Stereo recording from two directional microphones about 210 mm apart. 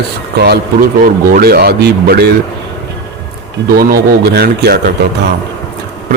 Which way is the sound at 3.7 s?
45° right (ahead or behind).